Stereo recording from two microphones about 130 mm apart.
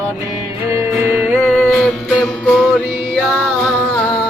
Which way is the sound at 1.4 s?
5° left (ahead or behind).